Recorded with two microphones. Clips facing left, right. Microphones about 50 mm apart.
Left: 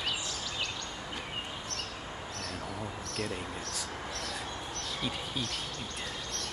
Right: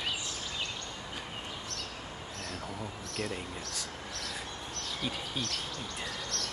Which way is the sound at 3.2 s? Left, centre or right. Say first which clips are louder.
Even; centre.